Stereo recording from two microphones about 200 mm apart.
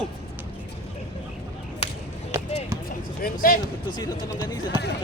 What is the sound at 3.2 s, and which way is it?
Speech, 45° left (ahead or behind).